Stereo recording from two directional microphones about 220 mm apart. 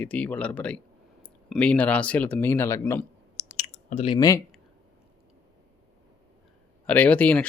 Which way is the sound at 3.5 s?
35° left (ahead or behind).